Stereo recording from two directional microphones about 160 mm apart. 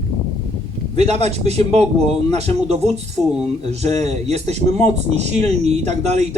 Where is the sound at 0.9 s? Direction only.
40° right (ahead or behind).